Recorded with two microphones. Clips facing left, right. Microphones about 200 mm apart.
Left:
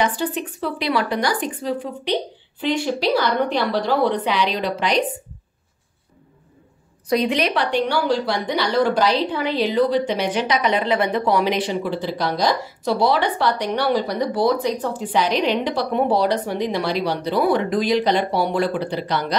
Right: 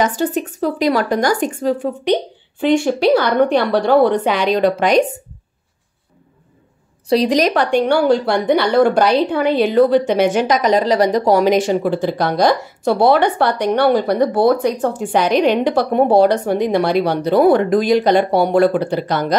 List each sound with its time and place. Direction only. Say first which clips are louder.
0.0 s a woman's voice: right 5 dB; 45° right (ahead or behind)
7.1 s a woman's voice: right 5 dB; 35° right (ahead or behind)